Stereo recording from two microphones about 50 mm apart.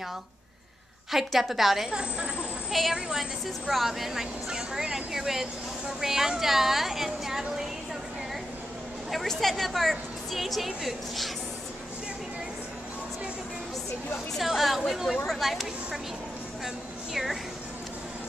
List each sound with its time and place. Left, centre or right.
1.1 s speech: centre
1.9 s a woman's voice: centre
2.7 s speech: centre
9.1 s speech: centre
14.3 s a woman's voice: centre